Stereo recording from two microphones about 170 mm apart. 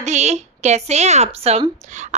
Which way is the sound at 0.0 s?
40° right (ahead or behind).